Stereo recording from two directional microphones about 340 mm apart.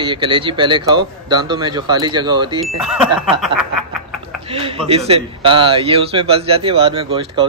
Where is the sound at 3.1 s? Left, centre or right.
Centre.